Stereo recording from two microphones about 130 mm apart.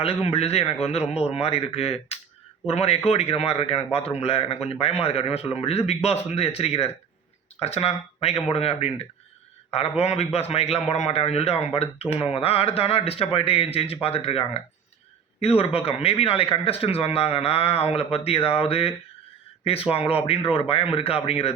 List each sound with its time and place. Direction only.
0.0 s a man's voice: 50° left (ahead or behind)